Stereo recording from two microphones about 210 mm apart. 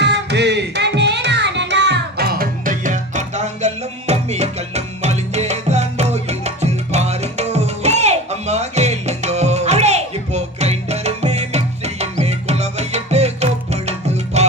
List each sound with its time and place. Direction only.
0.0 s music: 55° right (ahead or behind); by 14.4 s 30° right (ahead or behind)